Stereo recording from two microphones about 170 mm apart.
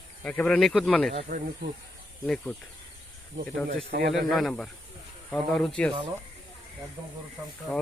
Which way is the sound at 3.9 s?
65° right (ahead or behind).